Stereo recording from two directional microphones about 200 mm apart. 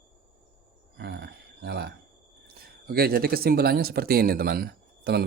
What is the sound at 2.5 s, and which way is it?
Speech, 50° right (ahead or behind).